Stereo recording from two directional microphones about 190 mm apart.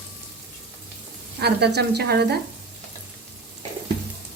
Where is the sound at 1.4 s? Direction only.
60° right (ahead or behind).